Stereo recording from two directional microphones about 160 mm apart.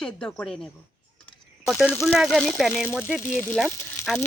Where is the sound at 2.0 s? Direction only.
Centre (ahead or behind).